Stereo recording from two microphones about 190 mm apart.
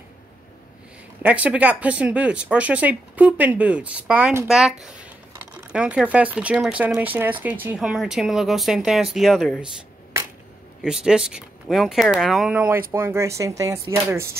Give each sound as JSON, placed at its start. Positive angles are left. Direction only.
{"t": 1.2, "sound": "speech", "side_deg": -5}
{"t": 10.8, "sound": "speech", "side_deg": -5}